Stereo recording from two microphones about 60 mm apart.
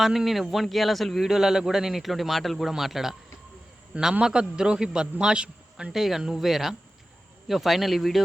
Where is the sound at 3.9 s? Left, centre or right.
Centre.